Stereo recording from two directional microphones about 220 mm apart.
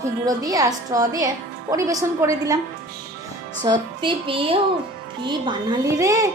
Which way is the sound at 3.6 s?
20° right (ahead or behind).